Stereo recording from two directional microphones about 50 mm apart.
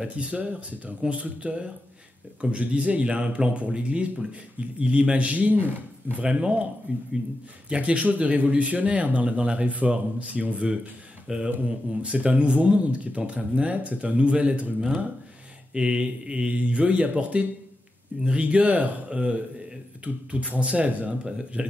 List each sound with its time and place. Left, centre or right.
0.0 s speech: right
6.2 s speech: right
7.7 s speech: right
11.2 s speech: centre
11.6 s speech: right
15.7 s speech: centre